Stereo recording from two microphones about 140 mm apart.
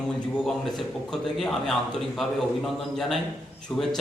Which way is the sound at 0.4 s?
Centre (ahead or behind).